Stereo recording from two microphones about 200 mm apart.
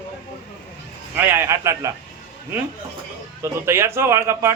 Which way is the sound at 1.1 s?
10° right (ahead or behind).